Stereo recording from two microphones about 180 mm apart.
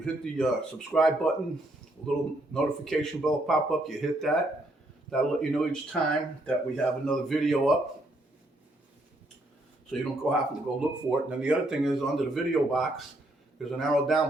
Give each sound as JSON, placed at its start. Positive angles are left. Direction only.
{"t": 0.0, "sound": "speech", "side_deg": 5}
{"t": 10.0, "sound": "speech", "side_deg": -5}